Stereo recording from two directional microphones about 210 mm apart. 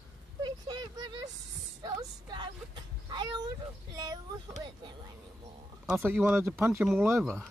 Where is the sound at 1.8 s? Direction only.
20° right (ahead or behind).